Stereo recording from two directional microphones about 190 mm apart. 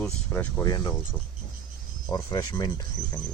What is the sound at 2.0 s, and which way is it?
Speech, 20° left (ahead or behind).